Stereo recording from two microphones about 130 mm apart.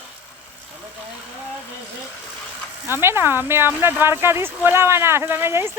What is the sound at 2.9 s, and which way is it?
Speech, 20° right (ahead or behind).